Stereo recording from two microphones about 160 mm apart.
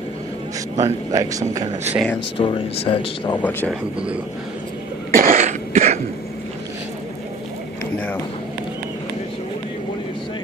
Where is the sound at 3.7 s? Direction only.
5° right (ahead or behind).